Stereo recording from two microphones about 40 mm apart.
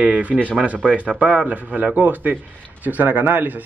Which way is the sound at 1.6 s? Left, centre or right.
Right.